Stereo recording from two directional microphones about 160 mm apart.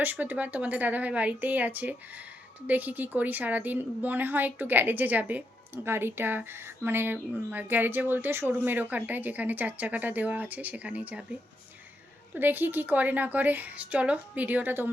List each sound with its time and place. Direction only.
0.0 s a woman's voice: 10° right (ahead or behind)